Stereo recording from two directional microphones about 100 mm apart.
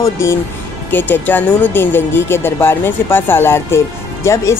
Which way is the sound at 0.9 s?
20° left (ahead or behind).